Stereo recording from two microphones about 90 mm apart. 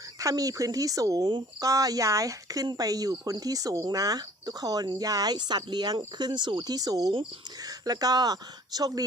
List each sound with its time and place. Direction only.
0.2 s speech: 40° right (ahead or behind)